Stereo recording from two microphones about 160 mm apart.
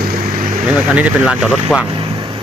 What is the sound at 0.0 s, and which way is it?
Vehicle, 60° right (ahead or behind).